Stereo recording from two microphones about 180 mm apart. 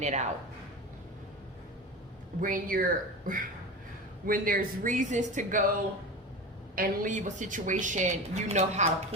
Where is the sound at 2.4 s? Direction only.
50° right (ahead or behind).